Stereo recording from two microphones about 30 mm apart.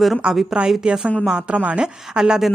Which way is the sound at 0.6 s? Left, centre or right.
Right.